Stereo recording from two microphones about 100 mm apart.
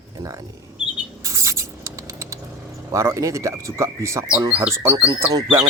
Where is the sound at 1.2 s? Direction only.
30° right (ahead or behind).